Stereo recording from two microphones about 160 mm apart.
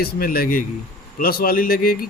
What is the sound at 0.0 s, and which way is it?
A man's voice, 70° left (ahead or behind).